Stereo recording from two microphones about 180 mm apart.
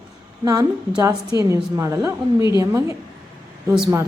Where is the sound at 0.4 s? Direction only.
20° right (ahead or behind).